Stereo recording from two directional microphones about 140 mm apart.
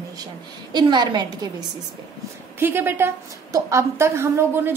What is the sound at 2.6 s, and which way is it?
A woman's voice, 15° right (ahead or behind).